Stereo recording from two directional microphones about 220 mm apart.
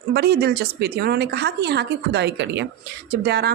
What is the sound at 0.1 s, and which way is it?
Speech, 45° right (ahead or behind).